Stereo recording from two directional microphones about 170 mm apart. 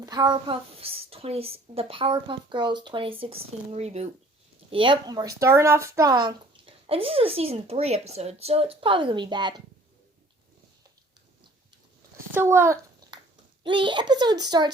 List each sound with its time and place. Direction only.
0.0 s speech: 25° right (ahead or behind)
12.1 s a sound: 15° right (ahead or behind)
13.7 s a child's voice: 30° right (ahead or behind)